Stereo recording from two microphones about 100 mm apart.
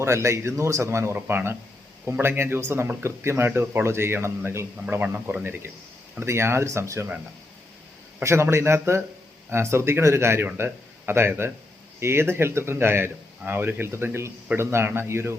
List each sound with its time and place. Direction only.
0.0 s speech: 25° right (ahead or behind)
8.2 s speech: 25° right (ahead or behind)